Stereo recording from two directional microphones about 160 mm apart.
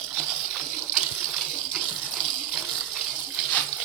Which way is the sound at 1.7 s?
10° right (ahead or behind).